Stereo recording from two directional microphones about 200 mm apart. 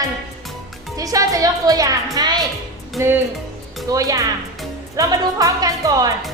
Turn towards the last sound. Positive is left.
turn(degrees=-20)  # may be behind; listen again after turning